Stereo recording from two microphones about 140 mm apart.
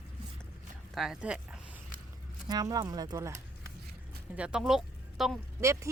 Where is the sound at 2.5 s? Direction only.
30° right (ahead or behind).